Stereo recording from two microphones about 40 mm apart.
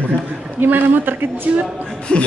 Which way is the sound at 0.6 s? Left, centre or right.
Right.